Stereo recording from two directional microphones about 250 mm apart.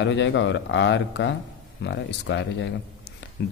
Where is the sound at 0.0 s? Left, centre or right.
Left.